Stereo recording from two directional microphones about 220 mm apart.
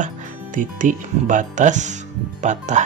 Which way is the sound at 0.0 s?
35° right (ahead or behind).